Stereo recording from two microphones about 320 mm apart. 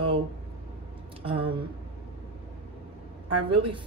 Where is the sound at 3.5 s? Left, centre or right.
Centre.